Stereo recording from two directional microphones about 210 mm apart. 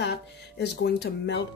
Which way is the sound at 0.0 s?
50° left (ahead or behind).